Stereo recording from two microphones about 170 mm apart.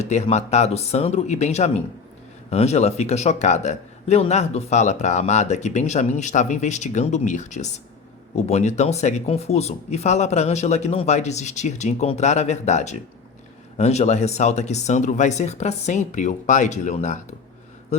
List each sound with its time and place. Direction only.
0.0 s a man's voice: 40° left (ahead or behind)